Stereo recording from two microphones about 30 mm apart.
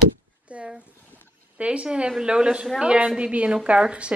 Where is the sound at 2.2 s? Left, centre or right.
Right.